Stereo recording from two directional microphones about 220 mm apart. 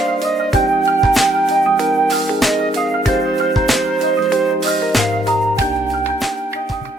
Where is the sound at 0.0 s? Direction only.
Centre (ahead or behind).